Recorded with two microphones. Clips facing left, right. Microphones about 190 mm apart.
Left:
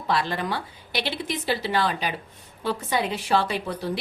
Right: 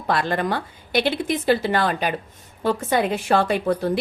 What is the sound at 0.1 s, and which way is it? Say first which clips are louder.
A woman's voice: right 4 dB; 50° right (ahead or behind).